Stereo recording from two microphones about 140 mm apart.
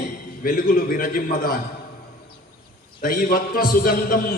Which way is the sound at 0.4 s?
90° left.